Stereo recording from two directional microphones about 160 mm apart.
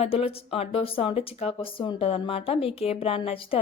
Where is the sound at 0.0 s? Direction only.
35° left (ahead or behind).